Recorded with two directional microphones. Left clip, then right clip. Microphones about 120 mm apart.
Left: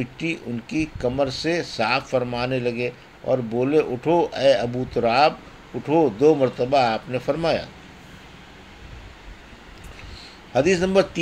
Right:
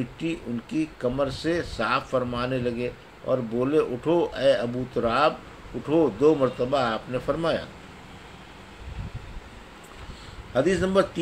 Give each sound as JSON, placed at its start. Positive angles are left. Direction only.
{"t": 0.2, "sound": "speech", "side_deg": 35}
{"t": 10.5, "sound": "speech", "side_deg": 40}